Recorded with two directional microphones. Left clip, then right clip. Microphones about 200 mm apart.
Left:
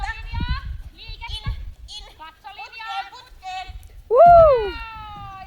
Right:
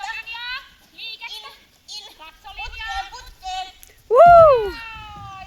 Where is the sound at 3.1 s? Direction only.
5° left (ahead or behind).